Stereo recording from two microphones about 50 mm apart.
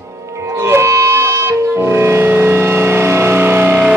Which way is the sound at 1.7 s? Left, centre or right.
Right.